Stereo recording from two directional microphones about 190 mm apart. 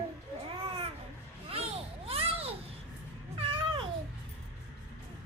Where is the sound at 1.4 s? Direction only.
30° right (ahead or behind).